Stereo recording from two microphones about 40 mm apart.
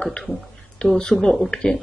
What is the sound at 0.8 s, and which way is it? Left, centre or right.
Speech, left.